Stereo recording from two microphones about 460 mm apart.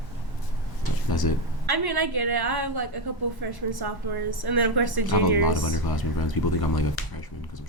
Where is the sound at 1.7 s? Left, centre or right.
Right.